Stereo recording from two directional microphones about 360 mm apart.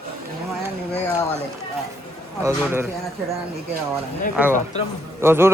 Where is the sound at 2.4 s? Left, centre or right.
Centre.